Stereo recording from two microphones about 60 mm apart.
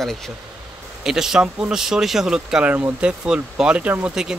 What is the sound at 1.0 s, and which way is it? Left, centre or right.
Speech, centre.